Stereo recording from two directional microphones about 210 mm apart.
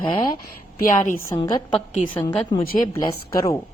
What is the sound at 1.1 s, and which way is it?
Speech, 15° left (ahead or behind).